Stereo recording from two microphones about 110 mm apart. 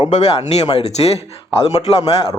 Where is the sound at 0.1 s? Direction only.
90° left; by 1.2 s 75° left (ahead or behind).